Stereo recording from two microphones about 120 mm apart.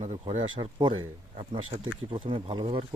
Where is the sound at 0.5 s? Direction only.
40° right (ahead or behind).